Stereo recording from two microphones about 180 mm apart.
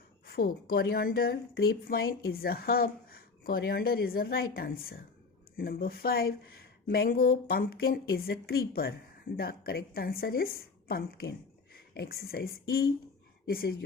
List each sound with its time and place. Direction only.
0.3 s speech: 55° left (ahead or behind)